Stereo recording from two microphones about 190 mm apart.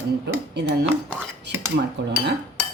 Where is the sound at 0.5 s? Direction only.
65° right (ahead or behind).